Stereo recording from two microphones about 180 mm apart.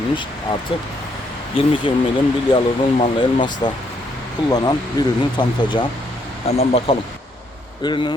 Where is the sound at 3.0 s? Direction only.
25° left (ahead or behind).